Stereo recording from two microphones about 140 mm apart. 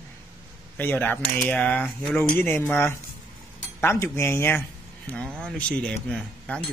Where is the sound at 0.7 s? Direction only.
15° left (ahead or behind).